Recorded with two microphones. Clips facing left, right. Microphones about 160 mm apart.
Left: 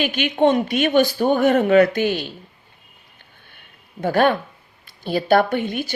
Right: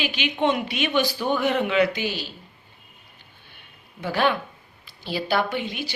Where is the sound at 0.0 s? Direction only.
50° left (ahead or behind).